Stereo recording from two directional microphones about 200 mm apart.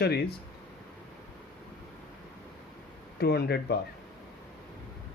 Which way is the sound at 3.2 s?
55° left (ahead or behind).